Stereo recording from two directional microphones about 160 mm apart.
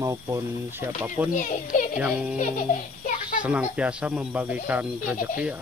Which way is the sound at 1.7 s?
50° left (ahead or behind).